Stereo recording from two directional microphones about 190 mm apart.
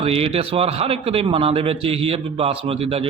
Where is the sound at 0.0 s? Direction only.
30° right (ahead or behind).